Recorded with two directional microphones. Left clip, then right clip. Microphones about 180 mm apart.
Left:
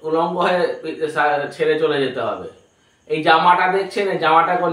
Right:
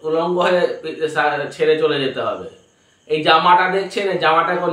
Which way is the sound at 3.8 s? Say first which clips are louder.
Right 1 dB; 15° right (ahead or behind).